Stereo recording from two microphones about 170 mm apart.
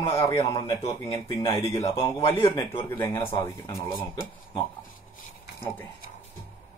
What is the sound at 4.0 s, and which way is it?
Speech, 25° left (ahead or behind).